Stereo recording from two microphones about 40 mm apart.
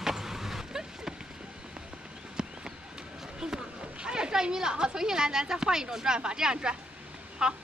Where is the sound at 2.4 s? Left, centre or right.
Centre.